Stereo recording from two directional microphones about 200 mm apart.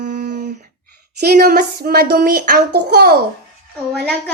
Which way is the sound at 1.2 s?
50° right (ahead or behind).